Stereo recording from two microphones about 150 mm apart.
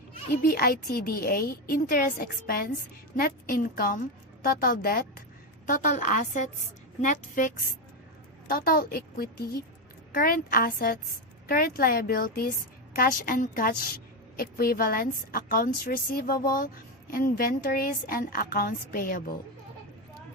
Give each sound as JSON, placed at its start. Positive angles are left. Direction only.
{"t": 0.4, "sound": "a woman's voice", "side_deg": 75}
{"t": 5.6, "sound": "a woman's voice", "side_deg": 60}
{"t": 8.4, "sound": "a woman's voice", "side_deg": 80}
{"t": 10.2, "sound": "a woman's voice", "side_deg": 70}